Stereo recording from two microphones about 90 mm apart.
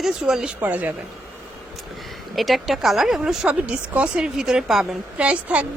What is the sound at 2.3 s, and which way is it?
Speech, centre (ahead or behind).